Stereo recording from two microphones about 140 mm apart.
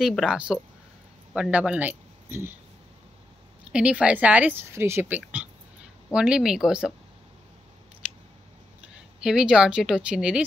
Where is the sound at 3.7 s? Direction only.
5° right (ahead or behind).